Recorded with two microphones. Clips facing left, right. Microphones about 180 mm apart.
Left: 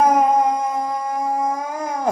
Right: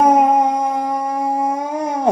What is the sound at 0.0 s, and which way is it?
Howl, 30° right (ahead or behind).